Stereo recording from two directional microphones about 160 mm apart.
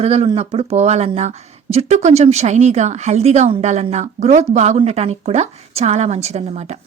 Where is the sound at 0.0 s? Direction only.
40° right (ahead or behind).